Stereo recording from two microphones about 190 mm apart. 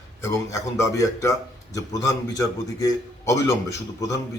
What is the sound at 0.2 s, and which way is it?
Speech, 15° left (ahead or behind).